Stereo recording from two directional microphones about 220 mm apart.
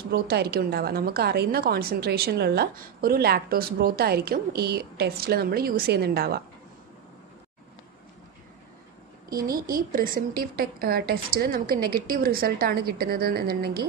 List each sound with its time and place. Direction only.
0.1 s a woman's voice: 45° right (ahead or behind)
9.4 s a woman's voice: 40° right (ahead or behind)